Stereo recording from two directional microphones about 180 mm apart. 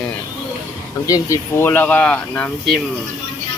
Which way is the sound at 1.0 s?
20° left (ahead or behind).